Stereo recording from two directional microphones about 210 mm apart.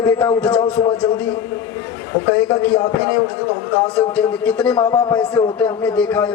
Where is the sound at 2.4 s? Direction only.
5° left (ahead or behind).